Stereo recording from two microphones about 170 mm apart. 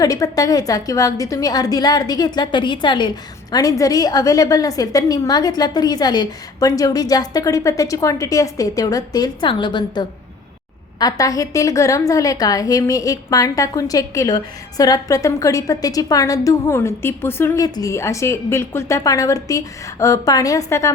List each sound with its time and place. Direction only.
0.0 s a woman's voice: 20° left (ahead or behind)